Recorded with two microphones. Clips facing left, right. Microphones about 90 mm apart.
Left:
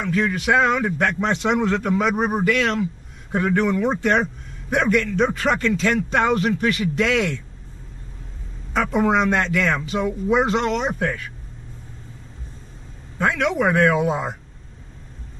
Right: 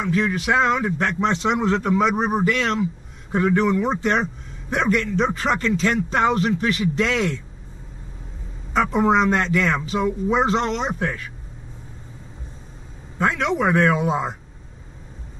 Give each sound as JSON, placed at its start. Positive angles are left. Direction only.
{"t": 0.0, "sound": "speech", "side_deg": 0}
{"t": 8.7, "sound": "speech", "side_deg": 0}
{"t": 13.2, "sound": "speech", "side_deg": 0}